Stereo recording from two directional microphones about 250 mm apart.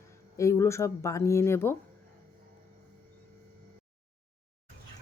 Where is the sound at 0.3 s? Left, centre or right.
Centre.